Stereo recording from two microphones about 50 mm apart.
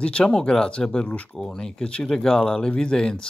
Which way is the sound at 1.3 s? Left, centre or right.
Centre.